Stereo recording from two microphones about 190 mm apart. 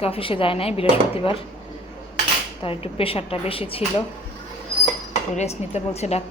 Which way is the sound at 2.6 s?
30° left (ahead or behind).